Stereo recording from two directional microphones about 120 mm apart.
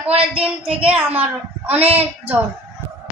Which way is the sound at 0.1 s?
50° right (ahead or behind).